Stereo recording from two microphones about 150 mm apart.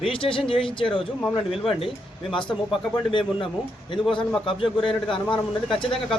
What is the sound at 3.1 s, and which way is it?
Speech, 35° left (ahead or behind).